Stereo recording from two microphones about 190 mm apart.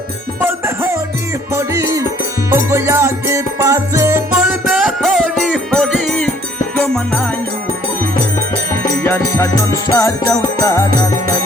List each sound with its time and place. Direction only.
0.3 s music: 10° right (ahead or behind)
4.7 s music: centre (ahead or behind)
9.0 s music: 10° left (ahead or behind)